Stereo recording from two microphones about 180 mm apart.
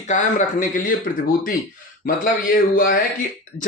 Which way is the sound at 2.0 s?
50° left (ahead or behind).